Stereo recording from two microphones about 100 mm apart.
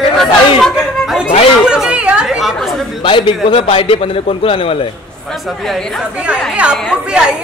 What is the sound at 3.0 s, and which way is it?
A man's voice, 60° left (ahead or behind).